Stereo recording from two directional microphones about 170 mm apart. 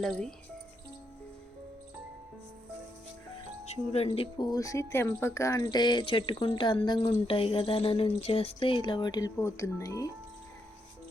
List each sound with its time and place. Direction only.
0.0 s speech: 5° left (ahead or behind)
3.9 s speech: 35° left (ahead or behind); by 10.1 s 20° left (ahead or behind)